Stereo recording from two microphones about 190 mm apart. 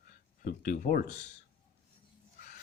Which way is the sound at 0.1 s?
50° left (ahead or behind).